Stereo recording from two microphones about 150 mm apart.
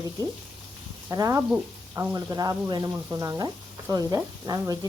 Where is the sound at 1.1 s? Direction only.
20° right (ahead or behind).